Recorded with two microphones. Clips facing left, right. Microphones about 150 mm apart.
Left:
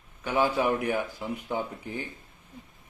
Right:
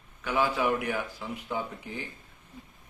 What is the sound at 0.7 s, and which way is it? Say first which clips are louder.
Speech: left 2 dB; 25° left (ahead or behind).